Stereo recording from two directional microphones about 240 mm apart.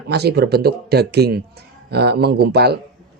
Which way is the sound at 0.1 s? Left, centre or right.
Right.